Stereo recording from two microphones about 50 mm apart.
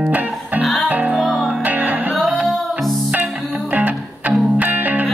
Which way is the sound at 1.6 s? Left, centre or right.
Right.